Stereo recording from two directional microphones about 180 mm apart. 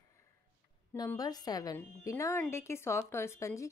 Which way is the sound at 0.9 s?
20° left (ahead or behind).